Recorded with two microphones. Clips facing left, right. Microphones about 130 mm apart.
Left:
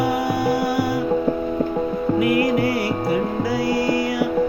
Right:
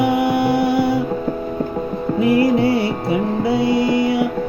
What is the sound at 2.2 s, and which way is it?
Music, 30° right (ahead or behind).